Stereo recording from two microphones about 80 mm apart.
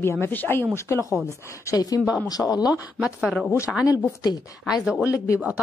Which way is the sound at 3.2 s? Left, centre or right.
Centre.